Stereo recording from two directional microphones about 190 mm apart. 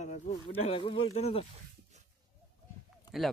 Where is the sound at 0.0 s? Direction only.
35° left (ahead or behind).